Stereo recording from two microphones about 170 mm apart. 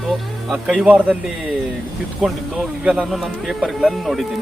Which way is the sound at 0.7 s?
5° right (ahead or behind).